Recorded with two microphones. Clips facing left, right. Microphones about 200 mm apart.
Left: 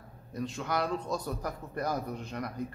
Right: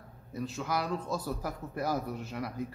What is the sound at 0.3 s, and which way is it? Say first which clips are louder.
A man's voice: even; 5° right (ahead or behind).